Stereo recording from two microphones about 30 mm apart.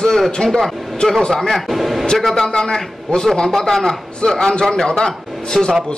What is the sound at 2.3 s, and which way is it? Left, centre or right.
A man's voice, left.